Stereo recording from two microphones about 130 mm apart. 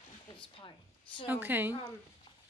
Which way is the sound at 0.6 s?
40° left (ahead or behind).